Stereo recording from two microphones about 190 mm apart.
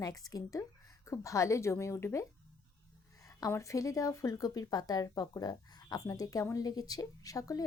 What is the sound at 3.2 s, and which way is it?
Speech, 15° left (ahead or behind).